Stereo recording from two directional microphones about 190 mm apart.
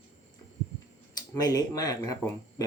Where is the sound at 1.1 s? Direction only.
20° left (ahead or behind).